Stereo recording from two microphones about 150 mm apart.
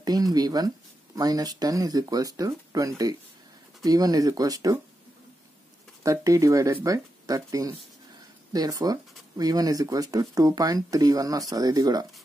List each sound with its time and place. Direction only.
0.0 s speech: 25° right (ahead or behind)
6.0 s speech: 20° right (ahead or behind)